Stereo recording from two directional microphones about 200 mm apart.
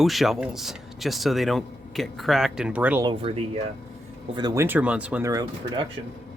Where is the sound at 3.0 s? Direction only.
25° right (ahead or behind).